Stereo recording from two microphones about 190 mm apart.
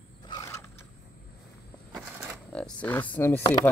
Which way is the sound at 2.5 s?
5° left (ahead or behind).